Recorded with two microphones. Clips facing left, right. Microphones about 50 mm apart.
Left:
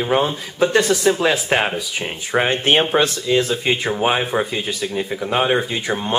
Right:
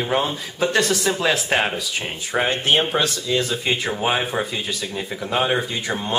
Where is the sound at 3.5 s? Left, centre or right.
Centre.